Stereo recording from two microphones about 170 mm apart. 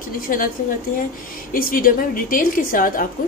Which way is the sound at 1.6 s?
55° left (ahead or behind).